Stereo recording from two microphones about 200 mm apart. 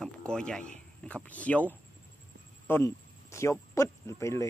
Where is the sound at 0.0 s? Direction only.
5° left (ahead or behind).